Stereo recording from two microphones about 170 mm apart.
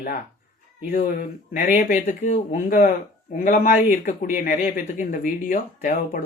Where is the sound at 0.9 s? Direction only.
55° left (ahead or behind).